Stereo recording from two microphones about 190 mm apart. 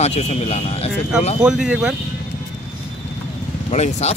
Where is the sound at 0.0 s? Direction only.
35° left (ahead or behind).